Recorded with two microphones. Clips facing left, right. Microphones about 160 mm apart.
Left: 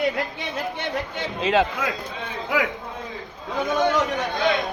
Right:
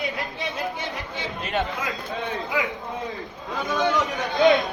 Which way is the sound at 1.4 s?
90° left.